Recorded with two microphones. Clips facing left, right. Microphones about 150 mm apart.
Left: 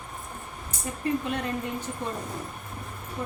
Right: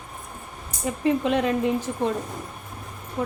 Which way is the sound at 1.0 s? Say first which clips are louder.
Right 7 dB; 90° right.